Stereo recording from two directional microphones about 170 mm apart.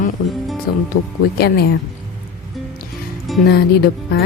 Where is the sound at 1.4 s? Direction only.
65° left (ahead or behind).